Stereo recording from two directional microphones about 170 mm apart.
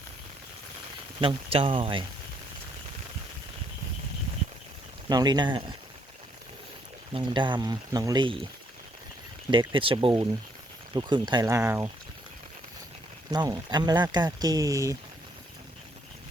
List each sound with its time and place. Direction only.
1.5 s speech: 35° right (ahead or behind)
5.0 s speech: 25° right (ahead or behind)
7.1 s speech: 30° right (ahead or behind)
9.5 s speech: 30° right (ahead or behind)
13.3 s speech: 25° right (ahead or behind)